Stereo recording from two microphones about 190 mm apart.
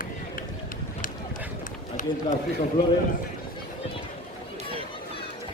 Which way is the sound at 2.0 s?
40° left (ahead or behind).